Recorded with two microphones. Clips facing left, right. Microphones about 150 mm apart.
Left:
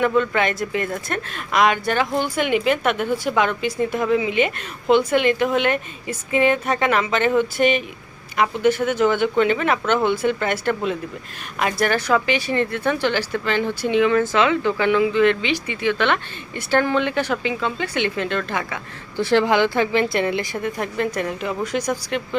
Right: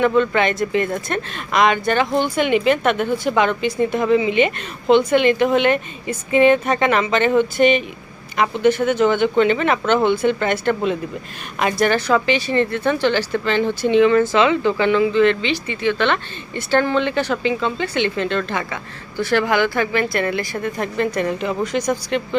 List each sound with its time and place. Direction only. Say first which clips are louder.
0.0 s a woman's voice: right 3 dB; 5° left (ahead or behind)
19.1 s a woman's voice: left 1 dB; 25° left (ahead or behind)
20.6 s a woman's voice: right 2 dB; 5° left (ahead or behind)